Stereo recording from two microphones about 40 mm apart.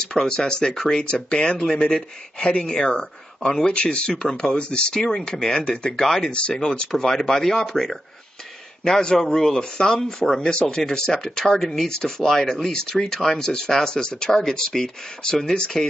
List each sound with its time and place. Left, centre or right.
0.0 s speech: centre
3.6 s speech: left
5.9 s speech: centre